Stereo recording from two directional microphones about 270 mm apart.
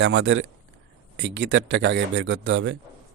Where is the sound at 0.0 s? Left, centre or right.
Right.